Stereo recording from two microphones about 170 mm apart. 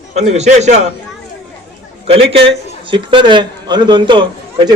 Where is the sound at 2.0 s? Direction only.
35° right (ahead or behind).